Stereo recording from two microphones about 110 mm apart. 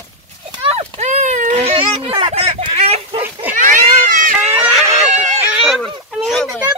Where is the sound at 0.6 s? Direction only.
60° right (ahead or behind).